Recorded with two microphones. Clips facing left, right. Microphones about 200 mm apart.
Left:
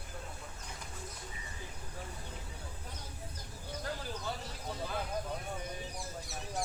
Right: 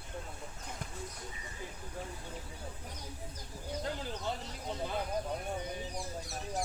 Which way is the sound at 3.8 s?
20° right (ahead or behind).